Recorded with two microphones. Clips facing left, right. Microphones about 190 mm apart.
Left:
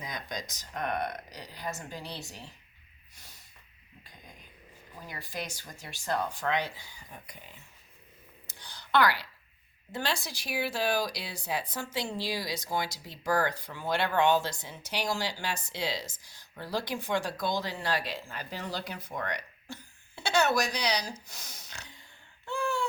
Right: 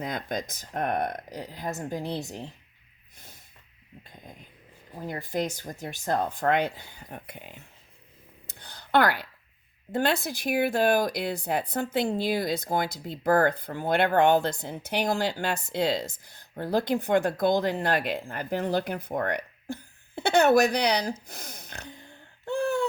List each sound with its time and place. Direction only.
0.0 s speech: 55° right (ahead or behind)
4.9 s speech: 50° right (ahead or behind)
8.4 s a sound: 55° right (ahead or behind)
9.9 s speech: 55° right (ahead or behind)